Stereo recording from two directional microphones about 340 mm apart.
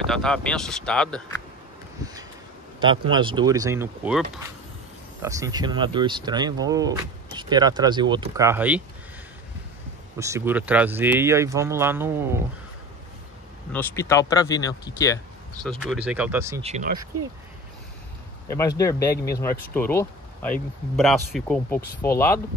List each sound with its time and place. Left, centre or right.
0.1 s speech: centre
2.8 s speech: centre
10.1 s speech: centre
13.7 s speech: centre
15.8 s speech: centre
16.6 s speech: right
18.5 s speech: centre